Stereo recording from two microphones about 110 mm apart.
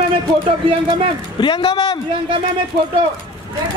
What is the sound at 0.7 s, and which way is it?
Speech, 55° right (ahead or behind).